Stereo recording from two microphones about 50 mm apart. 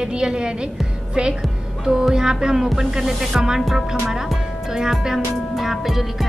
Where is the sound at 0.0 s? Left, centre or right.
Centre.